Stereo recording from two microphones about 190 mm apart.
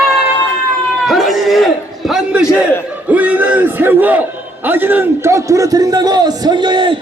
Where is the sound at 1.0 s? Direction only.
Centre (ahead or behind).